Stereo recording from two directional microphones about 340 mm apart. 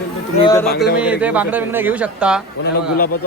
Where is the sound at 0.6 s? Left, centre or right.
Left.